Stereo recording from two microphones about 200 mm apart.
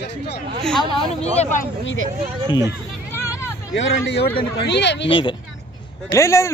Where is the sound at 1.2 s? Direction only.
35° left (ahead or behind).